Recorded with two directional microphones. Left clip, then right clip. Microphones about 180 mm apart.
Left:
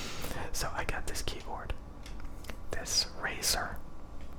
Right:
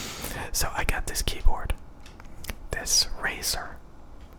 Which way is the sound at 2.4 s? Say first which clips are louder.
Right 7 dB; 15° right (ahead or behind).